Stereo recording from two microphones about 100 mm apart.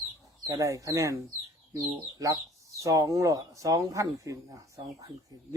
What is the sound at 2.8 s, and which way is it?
Speech, 35° right (ahead or behind).